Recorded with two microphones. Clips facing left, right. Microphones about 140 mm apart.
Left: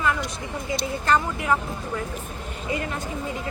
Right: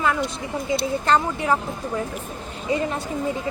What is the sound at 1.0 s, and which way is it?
Speech, 30° right (ahead or behind).